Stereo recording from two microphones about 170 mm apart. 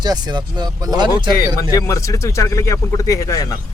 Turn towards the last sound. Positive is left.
turn(degrees=20)  # may be behind; listen again after turning